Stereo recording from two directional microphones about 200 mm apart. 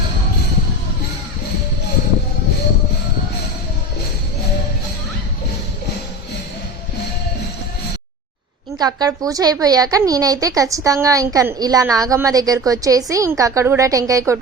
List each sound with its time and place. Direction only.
8.8 s a woman's voice: 20° right (ahead or behind)